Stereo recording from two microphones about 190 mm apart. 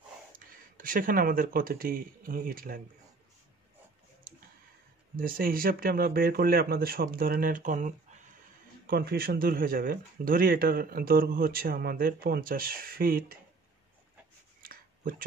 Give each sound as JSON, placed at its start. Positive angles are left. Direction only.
{"t": 0.7, "sound": "speech", "side_deg": -45}
{"t": 5.1, "sound": "speech", "side_deg": -50}
{"t": 8.8, "sound": "speech", "side_deg": -55}
{"t": 14.6, "sound": "a sound", "side_deg": -50}